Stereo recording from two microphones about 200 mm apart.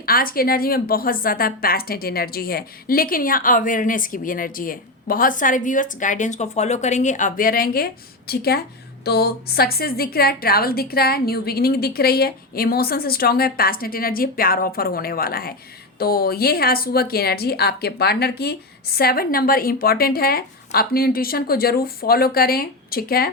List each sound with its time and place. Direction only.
0.0 s a woman's voice: 45° left (ahead or behind)